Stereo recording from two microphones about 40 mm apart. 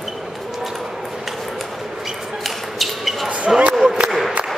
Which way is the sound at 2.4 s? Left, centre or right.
Centre.